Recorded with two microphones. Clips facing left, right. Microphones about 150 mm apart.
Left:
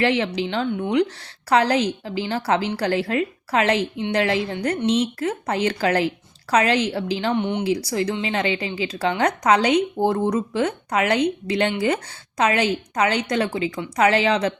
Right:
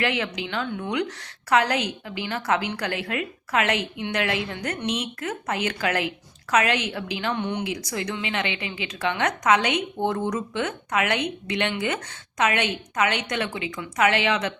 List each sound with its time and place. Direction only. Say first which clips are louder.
0.0 s a woman's voice: left 6 dB; 30° left (ahead or behind)